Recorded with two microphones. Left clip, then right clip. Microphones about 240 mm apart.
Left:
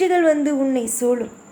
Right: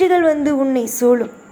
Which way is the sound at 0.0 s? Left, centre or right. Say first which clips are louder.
Right 3 dB; centre.